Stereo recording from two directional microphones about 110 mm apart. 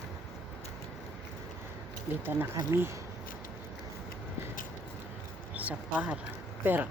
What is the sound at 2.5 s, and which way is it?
Speech, 30° right (ahead or behind).